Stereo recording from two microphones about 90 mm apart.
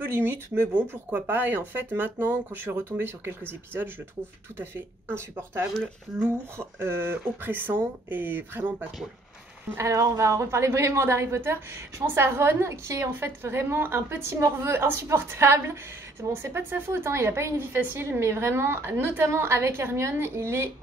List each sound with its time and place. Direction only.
0.0 s a woman's voice: 25° right (ahead or behind)
9.8 s a woman's voice: 35° right (ahead or behind)